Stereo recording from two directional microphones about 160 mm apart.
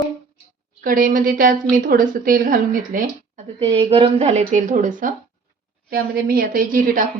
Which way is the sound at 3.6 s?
35° right (ahead or behind).